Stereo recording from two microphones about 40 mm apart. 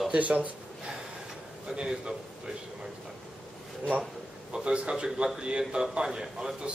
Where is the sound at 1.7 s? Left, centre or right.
Centre.